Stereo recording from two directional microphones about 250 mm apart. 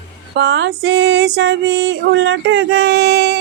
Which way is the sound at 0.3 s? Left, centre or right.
Right.